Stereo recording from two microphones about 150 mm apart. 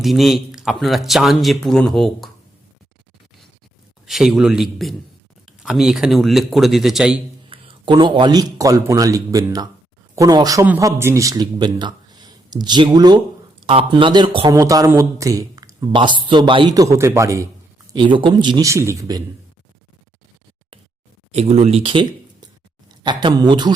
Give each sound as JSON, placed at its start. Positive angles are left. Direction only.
{"t": 0.0, "sound": "speech", "side_deg": 0}
{"t": 4.0, "sound": "speech", "side_deg": -5}
{"t": 7.5, "sound": "a man's voice", "side_deg": -35}
{"t": 17.9, "sound": "speech", "side_deg": -30}
{"t": 21.3, "sound": "speech", "side_deg": -50}